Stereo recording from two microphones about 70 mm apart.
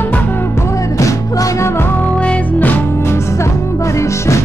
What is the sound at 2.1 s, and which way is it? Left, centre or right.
Music, centre.